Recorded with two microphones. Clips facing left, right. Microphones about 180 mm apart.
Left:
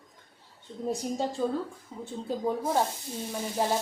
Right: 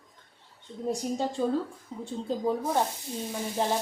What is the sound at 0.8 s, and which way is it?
Speech, centre (ahead or behind).